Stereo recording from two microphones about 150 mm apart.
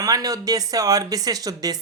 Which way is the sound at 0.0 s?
25° right (ahead or behind).